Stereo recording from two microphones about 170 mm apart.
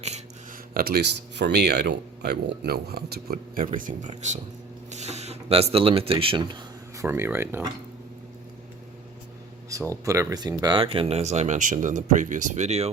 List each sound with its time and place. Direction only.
0.7 s speech: 60° right (ahead or behind)
3.8 s speech: 50° right (ahead or behind)
4.9 s a sound: 40° right (ahead or behind)
5.7 s speech: 35° right (ahead or behind); by 7.7 s 15° right (ahead or behind)
9.9 s speech: 20° right (ahead or behind); by 12.9 s 40° right (ahead or behind)